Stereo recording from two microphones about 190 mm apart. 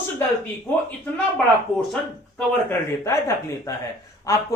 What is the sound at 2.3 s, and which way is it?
Speech, 15° left (ahead or behind).